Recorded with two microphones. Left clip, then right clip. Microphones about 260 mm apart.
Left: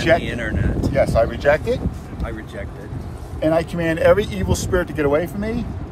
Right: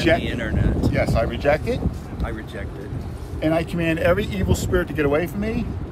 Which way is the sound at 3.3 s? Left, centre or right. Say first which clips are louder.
Left 3 dB; centre.